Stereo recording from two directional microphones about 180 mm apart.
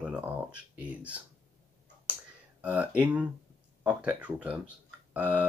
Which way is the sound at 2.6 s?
10° right (ahead or behind).